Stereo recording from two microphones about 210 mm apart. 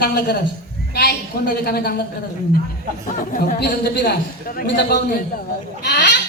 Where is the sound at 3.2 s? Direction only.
40° left (ahead or behind).